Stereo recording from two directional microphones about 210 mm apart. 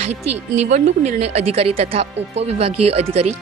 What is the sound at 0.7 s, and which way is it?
Speech, 30° right (ahead or behind).